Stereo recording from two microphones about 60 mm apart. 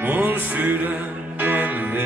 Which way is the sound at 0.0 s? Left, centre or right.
Right.